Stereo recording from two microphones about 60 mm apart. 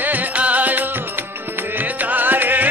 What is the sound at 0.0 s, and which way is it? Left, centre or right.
Music, right.